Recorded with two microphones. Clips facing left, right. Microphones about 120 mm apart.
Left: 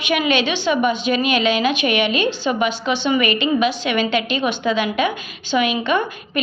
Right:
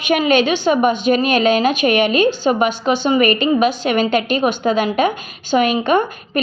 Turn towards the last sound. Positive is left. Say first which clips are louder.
# right 4 dB
turn(degrees=-45)  # may be behind; listen again after turning